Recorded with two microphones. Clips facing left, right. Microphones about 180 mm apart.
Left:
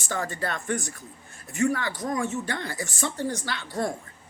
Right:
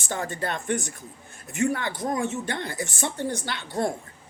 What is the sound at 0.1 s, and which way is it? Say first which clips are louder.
Speech: right 1 dB; 20° right (ahead or behind).